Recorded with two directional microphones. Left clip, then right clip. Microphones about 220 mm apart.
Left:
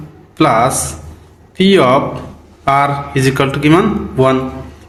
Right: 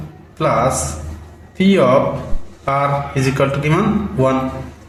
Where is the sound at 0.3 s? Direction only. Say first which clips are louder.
Left 4 dB; 40° left (ahead or behind).